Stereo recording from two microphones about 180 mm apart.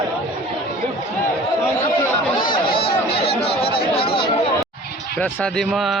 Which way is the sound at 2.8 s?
30° left (ahead or behind).